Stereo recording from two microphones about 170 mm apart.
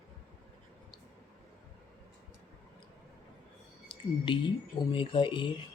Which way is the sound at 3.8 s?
30° left (ahead or behind).